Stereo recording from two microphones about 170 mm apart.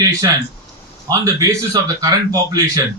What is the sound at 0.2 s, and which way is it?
A man's voice, 20° right (ahead or behind).